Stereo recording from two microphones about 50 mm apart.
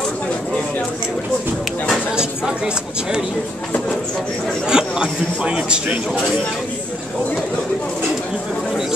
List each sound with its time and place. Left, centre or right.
2.1 s speech: centre
4.6 s a man's voice: centre